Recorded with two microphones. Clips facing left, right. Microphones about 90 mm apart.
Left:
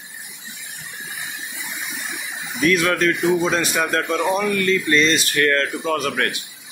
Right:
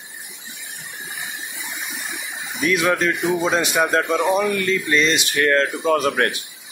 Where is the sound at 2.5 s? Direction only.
15° right (ahead or behind).